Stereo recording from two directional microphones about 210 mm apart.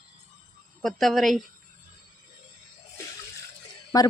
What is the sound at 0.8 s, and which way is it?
Speech, centre (ahead or behind).